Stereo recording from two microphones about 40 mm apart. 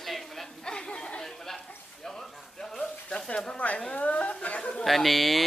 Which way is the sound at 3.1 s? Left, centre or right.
Left.